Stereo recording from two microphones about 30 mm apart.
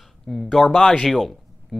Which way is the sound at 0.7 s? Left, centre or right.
Left.